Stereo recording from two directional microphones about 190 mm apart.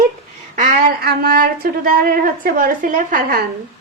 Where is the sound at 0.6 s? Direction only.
45° right (ahead or behind).